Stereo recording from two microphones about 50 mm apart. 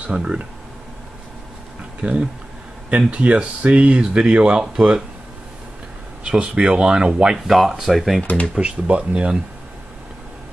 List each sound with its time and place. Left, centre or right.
0.0 s speech: centre
2.0 s speech: right
6.2 s speech: centre
7.4 s speech: centre
8.2 s speech: left
8.5 s speech: right